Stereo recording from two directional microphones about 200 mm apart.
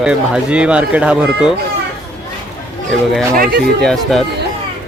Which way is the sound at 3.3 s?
50° right (ahead or behind).